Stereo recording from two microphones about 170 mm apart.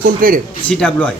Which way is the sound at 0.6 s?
5° left (ahead or behind).